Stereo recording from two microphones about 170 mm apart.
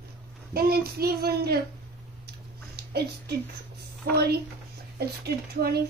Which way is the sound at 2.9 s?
70° right (ahead or behind).